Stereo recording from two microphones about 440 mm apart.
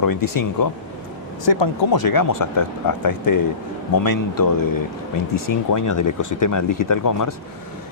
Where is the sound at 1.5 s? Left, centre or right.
Left.